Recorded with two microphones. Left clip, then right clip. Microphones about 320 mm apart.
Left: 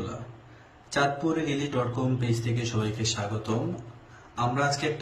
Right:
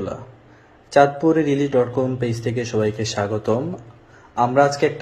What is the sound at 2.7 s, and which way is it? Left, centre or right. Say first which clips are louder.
A man's voice: right 11 dB; centre.